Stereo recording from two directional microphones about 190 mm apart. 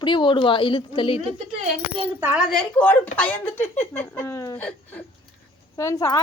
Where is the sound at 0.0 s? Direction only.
25° left (ahead or behind).